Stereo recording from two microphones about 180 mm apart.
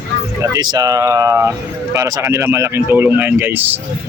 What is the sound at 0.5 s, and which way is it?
Speech, 20° right (ahead or behind).